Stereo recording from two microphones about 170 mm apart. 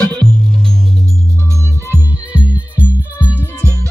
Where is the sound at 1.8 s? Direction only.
10° right (ahead or behind).